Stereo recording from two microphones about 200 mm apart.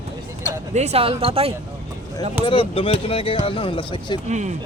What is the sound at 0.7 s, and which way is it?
Speech, 35° right (ahead or behind).